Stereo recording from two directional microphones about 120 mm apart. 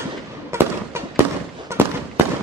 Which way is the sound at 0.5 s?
20° right (ahead or behind).